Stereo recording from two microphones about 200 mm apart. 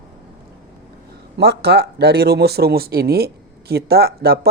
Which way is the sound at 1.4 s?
55° right (ahead or behind).